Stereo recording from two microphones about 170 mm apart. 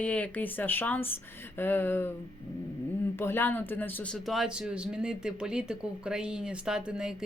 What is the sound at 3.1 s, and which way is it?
A man's voice, 15° left (ahead or behind).